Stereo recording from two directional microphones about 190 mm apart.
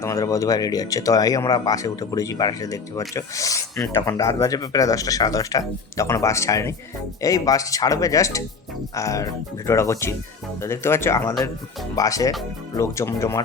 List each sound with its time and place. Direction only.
0.0 s speech: 15° left (ahead or behind)